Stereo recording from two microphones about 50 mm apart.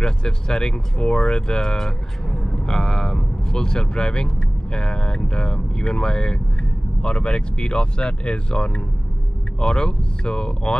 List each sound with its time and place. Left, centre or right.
0.0 s speech: centre